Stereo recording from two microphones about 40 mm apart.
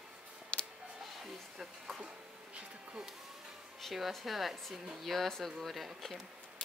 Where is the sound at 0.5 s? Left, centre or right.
Left.